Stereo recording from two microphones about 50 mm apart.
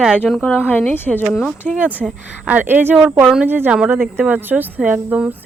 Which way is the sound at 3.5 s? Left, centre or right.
Right.